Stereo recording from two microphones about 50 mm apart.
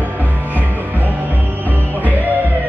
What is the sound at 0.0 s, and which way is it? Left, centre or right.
Music, right.